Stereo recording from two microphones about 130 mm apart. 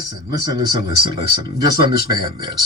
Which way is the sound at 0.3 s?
30° right (ahead or behind).